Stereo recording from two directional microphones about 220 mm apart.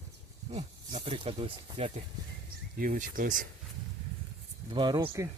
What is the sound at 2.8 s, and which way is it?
Speech, 40° right (ahead or behind).